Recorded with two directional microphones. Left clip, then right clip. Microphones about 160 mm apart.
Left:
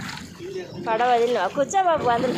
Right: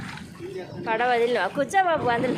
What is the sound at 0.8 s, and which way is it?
Speech, centre (ahead or behind).